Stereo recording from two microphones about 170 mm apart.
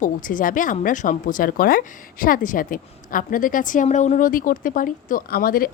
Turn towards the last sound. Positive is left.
turn(degrees=60)  # may be behind; listen again after turning